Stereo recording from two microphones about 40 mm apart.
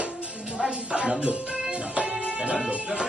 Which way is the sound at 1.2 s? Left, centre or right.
Right.